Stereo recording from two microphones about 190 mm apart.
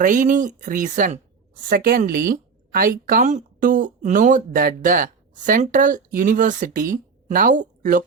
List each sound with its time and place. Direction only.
0.0 s speech: 45° right (ahead or behind)